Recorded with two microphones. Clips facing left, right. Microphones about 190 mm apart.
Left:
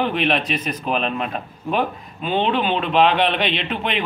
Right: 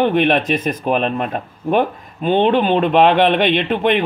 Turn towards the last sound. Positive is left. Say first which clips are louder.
# right 8 dB
turn(degrees=-50)  # may be behind; listen again after turning